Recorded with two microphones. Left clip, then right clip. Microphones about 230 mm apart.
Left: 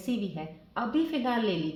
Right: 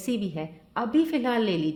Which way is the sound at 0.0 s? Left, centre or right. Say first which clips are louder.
Right 4 dB; right.